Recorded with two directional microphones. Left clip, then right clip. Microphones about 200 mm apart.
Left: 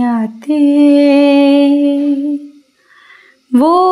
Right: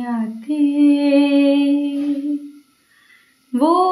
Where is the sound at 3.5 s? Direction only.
50° left (ahead or behind).